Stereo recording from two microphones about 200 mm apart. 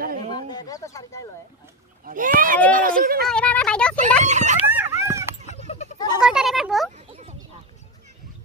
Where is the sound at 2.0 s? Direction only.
40° right (ahead or behind).